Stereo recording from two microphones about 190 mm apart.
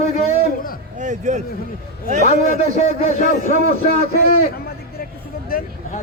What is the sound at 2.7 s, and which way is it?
Speech, 35° left (ahead or behind).